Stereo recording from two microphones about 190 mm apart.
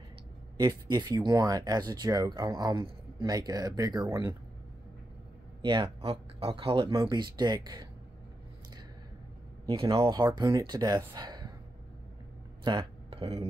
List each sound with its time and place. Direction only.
0.6 s speech: 20° right (ahead or behind)
5.6 s speech: 25° right (ahead or behind)
9.7 s speech: 25° right (ahead or behind)
12.6 s a sound: 25° right (ahead or behind)